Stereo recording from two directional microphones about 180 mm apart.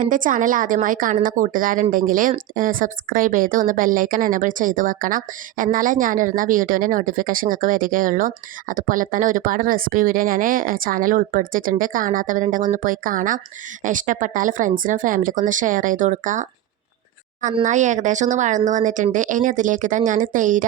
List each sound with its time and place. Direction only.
0.0 s speech: 45° right (ahead or behind)